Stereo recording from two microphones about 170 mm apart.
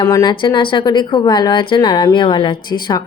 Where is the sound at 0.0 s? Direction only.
20° left (ahead or behind).